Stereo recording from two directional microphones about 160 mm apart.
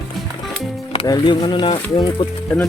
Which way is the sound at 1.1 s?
30° left (ahead or behind).